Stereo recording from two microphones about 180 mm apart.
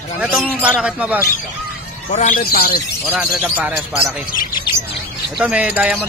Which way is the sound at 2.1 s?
45° left (ahead or behind).